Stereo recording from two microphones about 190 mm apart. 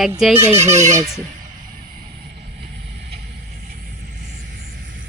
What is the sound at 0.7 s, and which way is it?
Speech, 35° right (ahead or behind).